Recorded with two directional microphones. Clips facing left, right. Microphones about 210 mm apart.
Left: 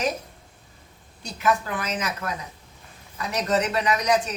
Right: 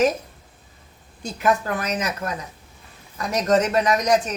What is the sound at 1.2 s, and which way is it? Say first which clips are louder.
Speech: right 3 dB; 40° right (ahead or behind).